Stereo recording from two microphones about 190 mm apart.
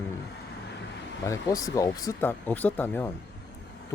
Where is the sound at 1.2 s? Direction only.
15° left (ahead or behind).